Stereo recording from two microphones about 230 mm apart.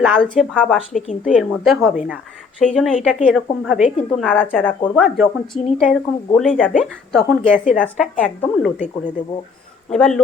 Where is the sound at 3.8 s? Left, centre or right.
Left.